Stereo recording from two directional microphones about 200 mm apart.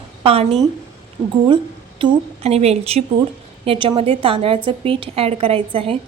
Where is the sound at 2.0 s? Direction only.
30° right (ahead or behind).